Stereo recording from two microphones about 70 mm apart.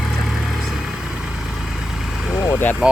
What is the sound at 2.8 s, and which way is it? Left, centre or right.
Speech, centre.